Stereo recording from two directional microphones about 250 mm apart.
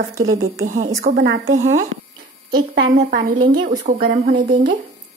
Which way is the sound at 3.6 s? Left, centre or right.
Right.